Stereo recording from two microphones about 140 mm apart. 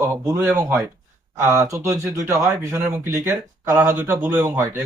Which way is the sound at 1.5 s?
20° right (ahead or behind).